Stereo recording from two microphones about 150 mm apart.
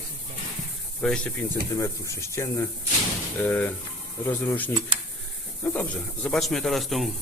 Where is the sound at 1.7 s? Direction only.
20° left (ahead or behind); by 7.1 s centre (ahead or behind).